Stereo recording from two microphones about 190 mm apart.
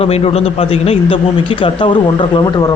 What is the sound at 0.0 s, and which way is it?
A man's voice, 30° left (ahead or behind).